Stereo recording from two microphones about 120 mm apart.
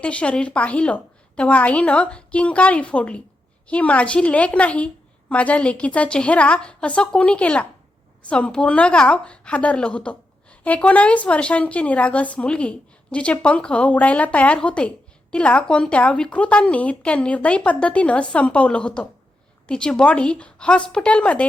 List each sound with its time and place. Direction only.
0.0 s a woman's voice: 10° left (ahead or behind)